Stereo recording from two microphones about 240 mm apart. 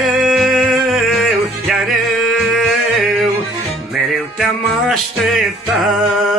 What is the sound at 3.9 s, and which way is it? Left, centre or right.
Music, centre.